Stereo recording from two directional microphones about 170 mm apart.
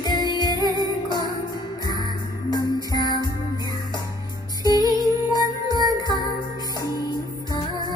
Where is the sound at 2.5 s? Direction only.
20° left (ahead or behind).